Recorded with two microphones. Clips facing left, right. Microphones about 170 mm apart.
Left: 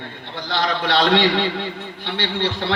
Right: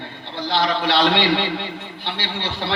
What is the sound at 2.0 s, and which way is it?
Speech, 50° left (ahead or behind).